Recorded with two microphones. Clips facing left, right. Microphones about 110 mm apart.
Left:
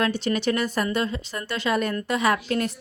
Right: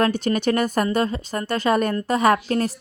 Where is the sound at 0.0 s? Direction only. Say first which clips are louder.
Right 3 dB; 45° right (ahead or behind).